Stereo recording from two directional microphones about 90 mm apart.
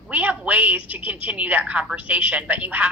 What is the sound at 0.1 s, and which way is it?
A woman's voice, 15° right (ahead or behind).